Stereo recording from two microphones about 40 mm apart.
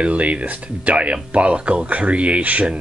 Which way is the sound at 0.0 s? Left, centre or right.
Right.